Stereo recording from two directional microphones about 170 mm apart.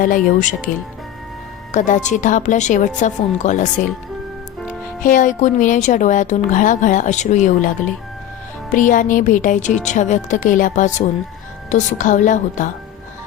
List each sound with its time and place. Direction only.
0.0 s speech: 55° left (ahead or behind)
1.7 s speech: 45° left (ahead or behind)
5.0 s speech: 50° left (ahead or behind)
8.7 s speech: 50° left (ahead or behind)